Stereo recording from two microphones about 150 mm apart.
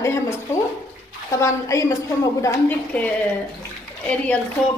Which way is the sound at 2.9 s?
10° left (ahead or behind).